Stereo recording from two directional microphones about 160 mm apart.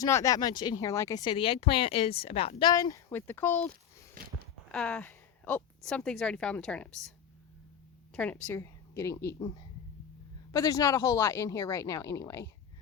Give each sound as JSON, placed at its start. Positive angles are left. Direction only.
{"t": 0.0, "sound": "speech", "side_deg": 20}
{"t": 2.7, "sound": "speech", "side_deg": 20}
{"t": 4.1, "sound": "a sound", "side_deg": -70}
{"t": 4.7, "sound": "a woman's voice", "side_deg": 5}
{"t": 8.1, "sound": "a woman's voice", "side_deg": 5}
{"t": 10.5, "sound": "speech", "side_deg": 20}